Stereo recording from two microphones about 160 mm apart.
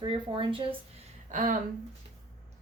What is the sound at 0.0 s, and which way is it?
Speech, 30° right (ahead or behind).